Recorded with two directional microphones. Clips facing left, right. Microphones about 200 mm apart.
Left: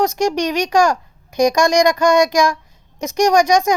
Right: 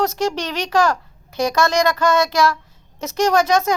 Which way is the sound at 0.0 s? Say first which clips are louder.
Left 4 dB; 15° left (ahead or behind).